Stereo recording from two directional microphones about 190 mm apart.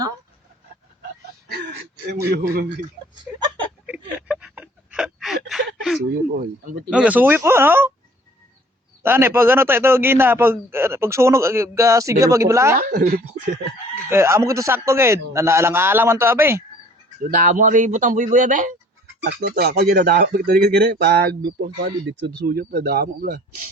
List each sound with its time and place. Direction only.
1.5 s a sound: 60° right (ahead or behind)
2.3 s speech: 60° right (ahead or behind)
3.3 s a man's voice: 5° right (ahead or behind)
3.8 s a sound: 5° right (ahead or behind)
6.9 s a man's voice: 5° right (ahead or behind)
9.0 s a man's voice: 10° right (ahead or behind)
12.7 s speech: 50° right (ahead or behind)
14.1 s a man's voice: 15° right (ahead or behind)
17.2 s speech: 45° right (ahead or behind)
19.2 s speech: 55° right (ahead or behind)